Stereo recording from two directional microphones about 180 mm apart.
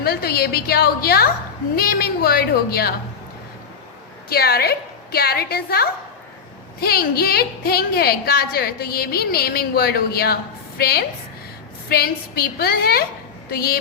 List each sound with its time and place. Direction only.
0.0 s a woman's voice: 60° left (ahead or behind)
4.3 s a woman's voice: 60° left (ahead or behind)